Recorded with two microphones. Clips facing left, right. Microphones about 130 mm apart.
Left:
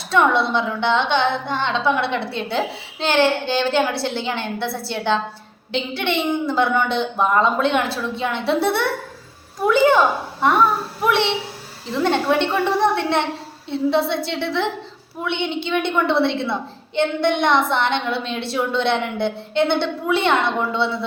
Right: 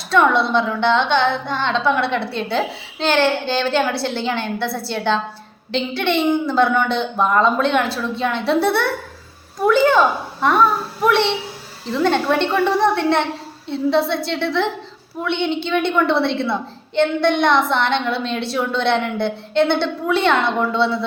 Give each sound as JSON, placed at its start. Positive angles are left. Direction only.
{"t": 0.5, "sound": "a woman's voice", "side_deg": 15}
{"t": 11.9, "sound": "a woman's voice", "side_deg": 15}